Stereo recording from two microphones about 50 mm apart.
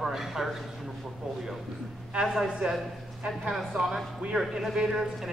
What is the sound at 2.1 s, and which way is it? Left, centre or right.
A woman's voice, centre.